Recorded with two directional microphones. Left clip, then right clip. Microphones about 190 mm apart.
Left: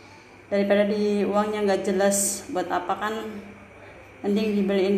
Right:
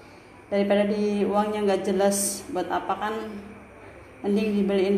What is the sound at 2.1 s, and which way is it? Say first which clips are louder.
Speech: left 2 dB; 25° left (ahead or behind).